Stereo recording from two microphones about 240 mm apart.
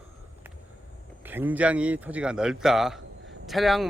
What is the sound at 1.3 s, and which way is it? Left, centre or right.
Speech, centre.